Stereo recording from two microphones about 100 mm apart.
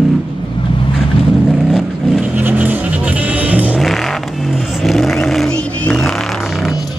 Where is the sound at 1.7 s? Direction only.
5° right (ahead or behind).